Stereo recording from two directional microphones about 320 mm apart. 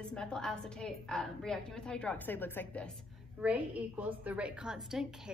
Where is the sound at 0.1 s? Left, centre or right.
Centre.